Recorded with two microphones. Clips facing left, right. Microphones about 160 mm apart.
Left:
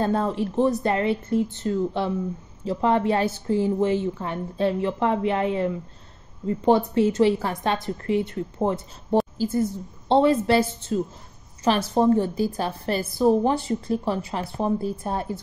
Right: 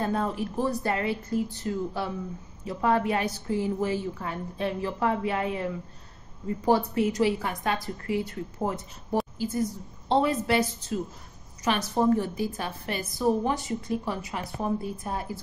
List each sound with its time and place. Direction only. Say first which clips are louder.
0.0 s a woman's voice: left 5 dB; 30° left (ahead or behind)